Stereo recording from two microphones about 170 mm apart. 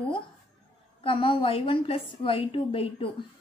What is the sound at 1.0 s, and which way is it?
A woman's voice, 30° left (ahead or behind).